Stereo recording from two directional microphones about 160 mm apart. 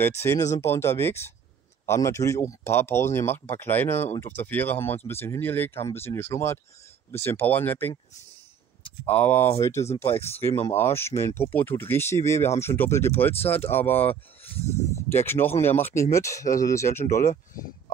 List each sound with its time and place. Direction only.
0.0 s speech: 15° left (ahead or behind)
10.0 s speech: 40° left (ahead or behind)
10.7 s speech: 15° left (ahead or behind)
13.6 s speech: 40° left (ahead or behind)
13.8 s speech: 10° left (ahead or behind)
14.4 s a sound: 40° left (ahead or behind)
15.0 s speech: 15° left (ahead or behind)